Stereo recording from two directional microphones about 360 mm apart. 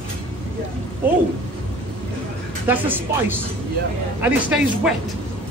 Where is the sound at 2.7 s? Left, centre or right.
Centre.